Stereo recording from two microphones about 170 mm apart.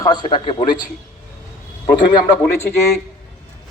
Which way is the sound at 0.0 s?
25° left (ahead or behind).